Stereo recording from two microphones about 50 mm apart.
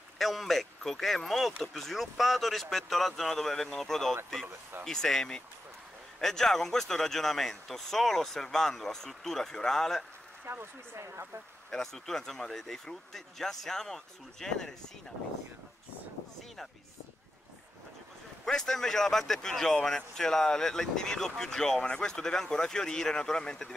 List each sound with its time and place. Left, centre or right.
0.2 s speech: centre
10.4 s speech: right
11.7 s speech: centre
18.4 s speech: centre